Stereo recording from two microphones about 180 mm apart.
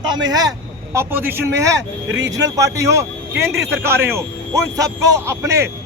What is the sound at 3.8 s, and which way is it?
Speech, 15° right (ahead or behind).